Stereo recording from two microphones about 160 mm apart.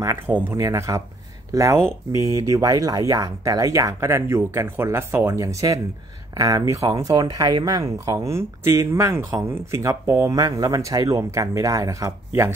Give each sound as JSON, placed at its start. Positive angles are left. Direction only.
{"t": 0.0, "sound": "speech", "side_deg": -15}